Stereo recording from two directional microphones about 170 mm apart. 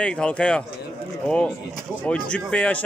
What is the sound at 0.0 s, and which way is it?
A man's voice, 5° left (ahead or behind).